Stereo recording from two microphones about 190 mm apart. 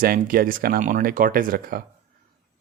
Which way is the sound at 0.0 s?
50° right (ahead or behind).